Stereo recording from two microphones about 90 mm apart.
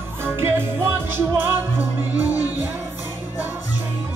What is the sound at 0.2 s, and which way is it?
Music, 25° right (ahead or behind).